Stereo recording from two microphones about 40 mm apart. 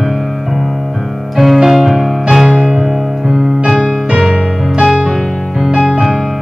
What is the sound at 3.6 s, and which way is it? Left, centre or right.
Music, centre.